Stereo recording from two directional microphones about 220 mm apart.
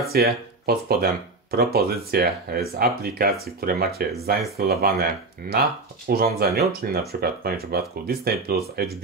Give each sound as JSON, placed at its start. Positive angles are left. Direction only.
{"t": 0.1, "sound": "speech", "side_deg": -45}